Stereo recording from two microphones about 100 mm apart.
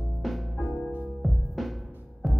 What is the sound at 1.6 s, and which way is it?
Music, centre (ahead or behind).